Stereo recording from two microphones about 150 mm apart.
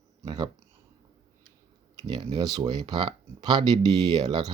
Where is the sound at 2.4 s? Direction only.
25° right (ahead or behind).